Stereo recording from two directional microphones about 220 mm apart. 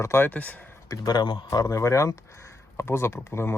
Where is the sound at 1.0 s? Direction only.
20° left (ahead or behind).